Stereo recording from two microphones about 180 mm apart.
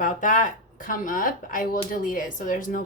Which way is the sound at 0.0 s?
45° left (ahead or behind).